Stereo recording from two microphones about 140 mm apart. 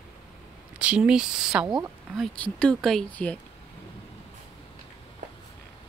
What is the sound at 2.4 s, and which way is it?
Speech, 5° left (ahead or behind).